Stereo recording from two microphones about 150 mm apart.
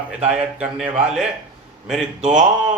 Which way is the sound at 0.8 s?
45° right (ahead or behind).